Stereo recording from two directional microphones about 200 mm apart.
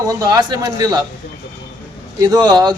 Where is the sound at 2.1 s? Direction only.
20° right (ahead or behind).